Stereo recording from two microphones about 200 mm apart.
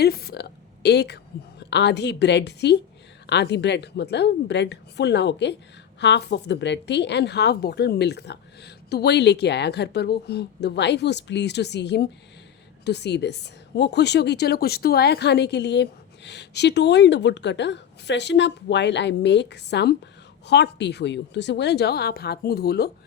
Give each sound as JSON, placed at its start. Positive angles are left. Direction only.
{"t": 0.0, "sound": "a woman's voice", "side_deg": 50}